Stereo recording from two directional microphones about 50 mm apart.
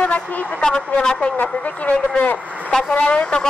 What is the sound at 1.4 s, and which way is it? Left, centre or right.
A woman's voice, left.